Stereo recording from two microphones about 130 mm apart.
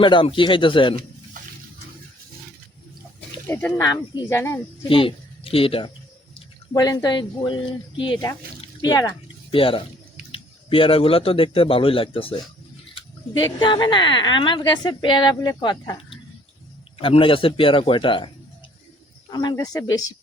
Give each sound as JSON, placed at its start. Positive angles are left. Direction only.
{"t": 0.0, "sound": "speech", "side_deg": 40}
{"t": 3.4, "sound": "speech", "side_deg": 15}
{"t": 3.8, "sound": "speech", "side_deg": 30}
{"t": 4.9, "sound": "speech", "side_deg": 45}
{"t": 6.7, "sound": "speech", "side_deg": 30}
{"t": 9.5, "sound": "a man's voice", "side_deg": 45}
{"t": 13.6, "sound": "a man's voice", "side_deg": 35}
{"t": 19.3, "sound": "speech", "side_deg": 30}